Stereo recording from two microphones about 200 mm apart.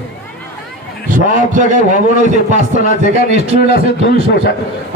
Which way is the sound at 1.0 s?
40° right (ahead or behind).